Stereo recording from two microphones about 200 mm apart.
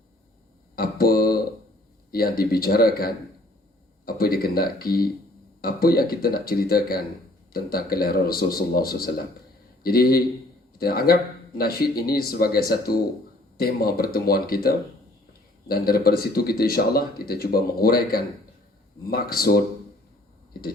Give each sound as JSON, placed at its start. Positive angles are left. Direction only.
{"t": 0.8, "sound": "a sound", "side_deg": 50}
{"t": 2.0, "sound": "speech", "side_deg": 50}
{"t": 15.7, "sound": "speech", "side_deg": 50}